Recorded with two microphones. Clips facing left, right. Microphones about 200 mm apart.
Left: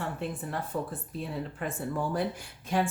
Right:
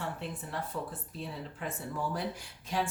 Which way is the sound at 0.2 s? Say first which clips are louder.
Left 4 dB; 50° left (ahead or behind).